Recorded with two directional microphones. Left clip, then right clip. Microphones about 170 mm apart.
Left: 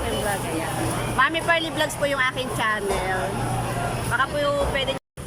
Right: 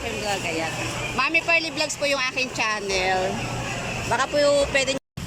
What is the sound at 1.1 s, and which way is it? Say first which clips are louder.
A woman's voice: even; 10° right (ahead or behind).